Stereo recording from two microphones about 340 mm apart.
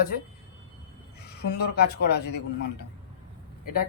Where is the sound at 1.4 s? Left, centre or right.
Left.